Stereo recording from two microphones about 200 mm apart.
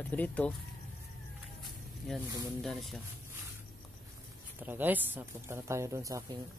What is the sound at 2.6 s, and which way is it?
Speech, centre (ahead or behind).